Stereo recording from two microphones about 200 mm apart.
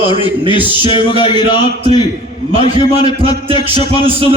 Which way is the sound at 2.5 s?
30° right (ahead or behind).